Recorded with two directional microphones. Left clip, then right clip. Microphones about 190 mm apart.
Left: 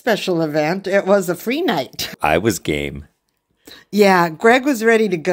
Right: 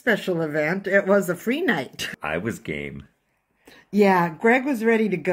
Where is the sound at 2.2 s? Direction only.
60° left (ahead or behind).